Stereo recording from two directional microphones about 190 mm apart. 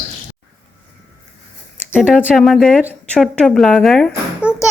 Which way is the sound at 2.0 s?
5° right (ahead or behind).